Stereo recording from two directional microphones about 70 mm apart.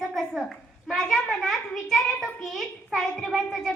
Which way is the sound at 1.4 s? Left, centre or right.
Centre.